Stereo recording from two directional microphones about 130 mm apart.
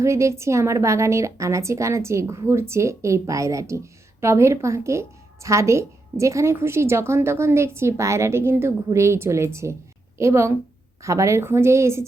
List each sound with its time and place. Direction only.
0.0 s a woman's voice: 20° right (ahead or behind)